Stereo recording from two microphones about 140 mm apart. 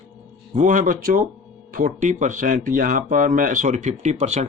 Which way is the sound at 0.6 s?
70° right (ahead or behind).